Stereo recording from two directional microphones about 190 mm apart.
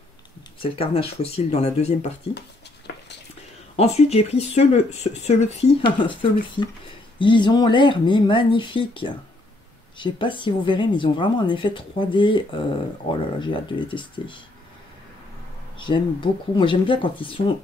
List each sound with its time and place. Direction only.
0.6 s speech: 30° left (ahead or behind)
3.7 s speech: 35° left (ahead or behind)
5.9 s speech: 25° left (ahead or behind)
15.8 s speech: 25° left (ahead or behind)